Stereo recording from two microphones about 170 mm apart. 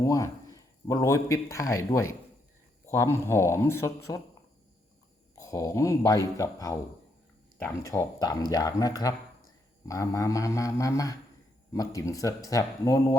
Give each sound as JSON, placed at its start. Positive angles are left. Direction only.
{"t": 0.0, "sound": "speech", "side_deg": 20}
{"t": 5.3, "sound": "speech", "side_deg": 20}